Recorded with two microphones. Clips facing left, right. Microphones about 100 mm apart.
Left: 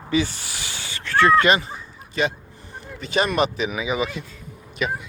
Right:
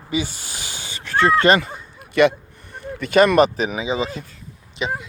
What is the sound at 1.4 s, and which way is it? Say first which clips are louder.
Speech: right 3 dB; 45° right (ahead or behind).